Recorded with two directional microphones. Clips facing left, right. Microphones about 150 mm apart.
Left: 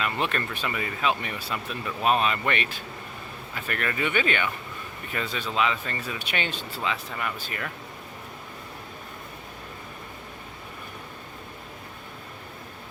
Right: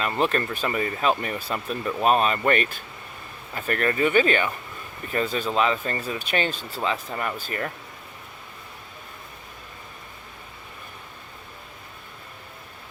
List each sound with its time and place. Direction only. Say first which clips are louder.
0.0 s speech: right 4 dB; 35° right (ahead or behind)